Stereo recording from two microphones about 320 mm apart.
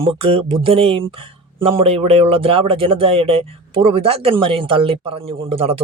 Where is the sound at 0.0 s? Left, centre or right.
Centre.